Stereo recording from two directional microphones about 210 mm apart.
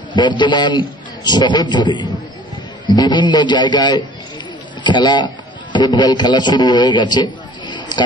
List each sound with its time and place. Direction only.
0.1 s a man's voice: 20° left (ahead or behind)